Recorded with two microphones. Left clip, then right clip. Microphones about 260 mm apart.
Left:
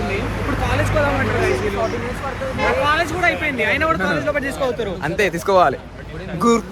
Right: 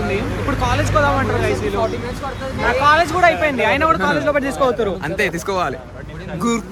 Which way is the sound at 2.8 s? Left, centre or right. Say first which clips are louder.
Right 9 dB; centre.